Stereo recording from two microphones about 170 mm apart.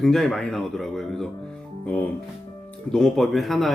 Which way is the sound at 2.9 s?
Centre (ahead or behind).